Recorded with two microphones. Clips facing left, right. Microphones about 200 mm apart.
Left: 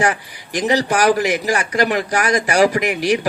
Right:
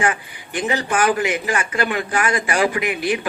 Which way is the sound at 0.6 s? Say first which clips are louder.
Left 4 dB; 40° left (ahead or behind).